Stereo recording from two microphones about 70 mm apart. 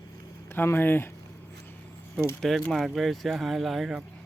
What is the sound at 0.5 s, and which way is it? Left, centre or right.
Speech, left.